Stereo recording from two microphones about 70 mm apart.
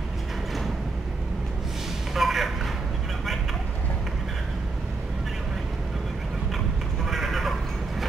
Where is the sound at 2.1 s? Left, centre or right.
Centre.